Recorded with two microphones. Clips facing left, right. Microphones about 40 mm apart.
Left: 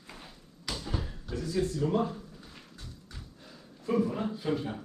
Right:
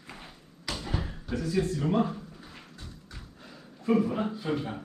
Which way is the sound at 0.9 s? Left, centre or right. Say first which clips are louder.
Right 3 dB; right.